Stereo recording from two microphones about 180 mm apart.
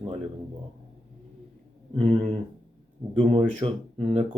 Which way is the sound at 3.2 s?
30° right (ahead or behind).